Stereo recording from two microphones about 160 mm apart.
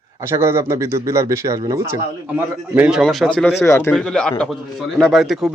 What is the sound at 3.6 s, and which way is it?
Speech, 15° left (ahead or behind).